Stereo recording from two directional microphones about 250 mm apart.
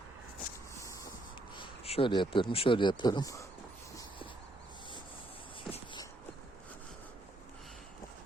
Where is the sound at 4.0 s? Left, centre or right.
Centre.